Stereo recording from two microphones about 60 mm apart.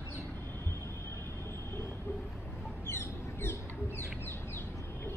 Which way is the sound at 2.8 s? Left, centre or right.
Left.